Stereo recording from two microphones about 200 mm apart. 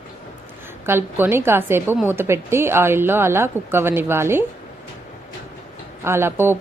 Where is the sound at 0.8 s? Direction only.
10° right (ahead or behind).